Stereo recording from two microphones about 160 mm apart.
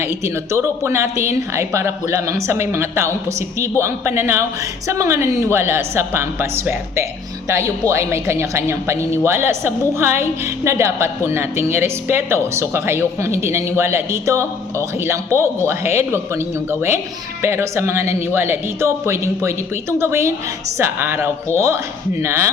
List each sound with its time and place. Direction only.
0.5 s speech: 15° right (ahead or behind)
17.4 s speech: 15° right (ahead or behind)